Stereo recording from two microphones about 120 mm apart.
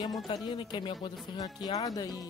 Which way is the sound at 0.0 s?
40° left (ahead or behind).